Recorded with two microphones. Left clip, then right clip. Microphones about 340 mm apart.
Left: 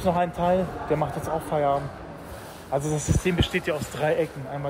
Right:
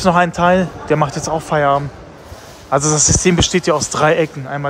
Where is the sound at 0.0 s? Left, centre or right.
Right.